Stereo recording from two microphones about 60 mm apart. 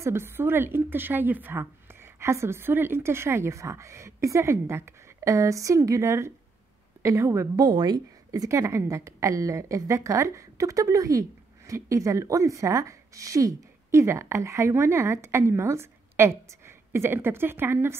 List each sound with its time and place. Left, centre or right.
0.0 s a woman's voice: right